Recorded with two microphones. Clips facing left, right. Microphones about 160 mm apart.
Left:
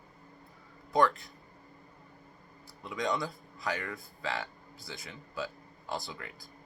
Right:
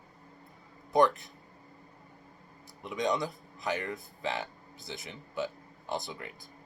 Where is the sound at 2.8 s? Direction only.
20° right (ahead or behind).